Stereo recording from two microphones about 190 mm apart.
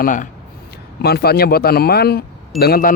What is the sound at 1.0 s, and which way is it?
Speech, 55° left (ahead or behind).